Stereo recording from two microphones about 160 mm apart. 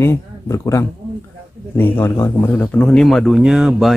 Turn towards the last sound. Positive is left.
turn(degrees=-5)  # may be behind; listen again after turning